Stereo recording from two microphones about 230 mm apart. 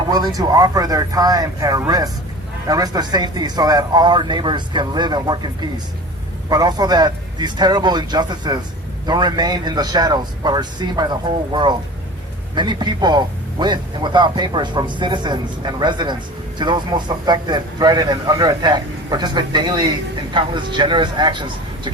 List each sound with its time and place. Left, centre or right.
0.3 s a man's voice: centre